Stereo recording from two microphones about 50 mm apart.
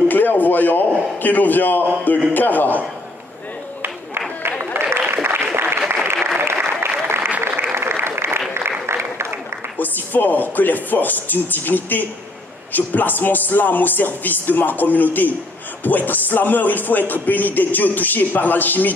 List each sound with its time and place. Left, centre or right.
0.1 s a sound: left
2.3 s speech: left
4.7 s applause: right
9.8 s speech: left